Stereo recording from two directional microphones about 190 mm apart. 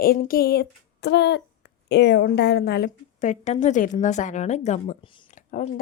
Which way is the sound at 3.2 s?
40° left (ahead or behind).